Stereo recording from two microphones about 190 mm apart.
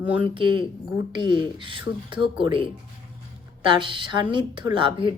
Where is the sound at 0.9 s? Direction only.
25° right (ahead or behind).